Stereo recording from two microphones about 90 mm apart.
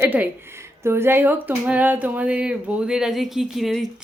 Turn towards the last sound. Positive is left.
turn(degrees=-5)  # may be behind; listen again after turning